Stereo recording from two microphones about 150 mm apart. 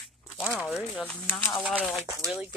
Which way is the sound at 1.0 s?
5° left (ahead or behind).